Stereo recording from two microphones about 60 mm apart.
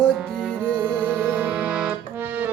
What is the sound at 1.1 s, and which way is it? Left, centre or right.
Music, right.